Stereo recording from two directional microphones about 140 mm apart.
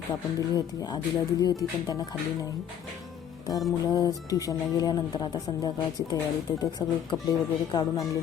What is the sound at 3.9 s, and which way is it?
Speech, 25° left (ahead or behind).